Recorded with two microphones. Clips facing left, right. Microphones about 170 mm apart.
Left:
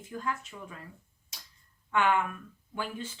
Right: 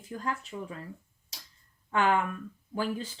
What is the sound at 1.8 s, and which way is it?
Speech, 35° right (ahead or behind).